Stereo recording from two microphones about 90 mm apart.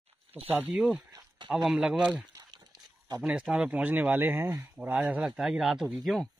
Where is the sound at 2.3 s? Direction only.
45° right (ahead or behind).